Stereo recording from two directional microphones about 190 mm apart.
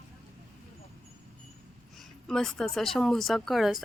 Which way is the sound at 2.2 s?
5° left (ahead or behind).